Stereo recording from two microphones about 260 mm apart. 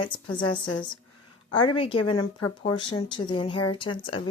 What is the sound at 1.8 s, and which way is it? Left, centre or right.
Speech, centre.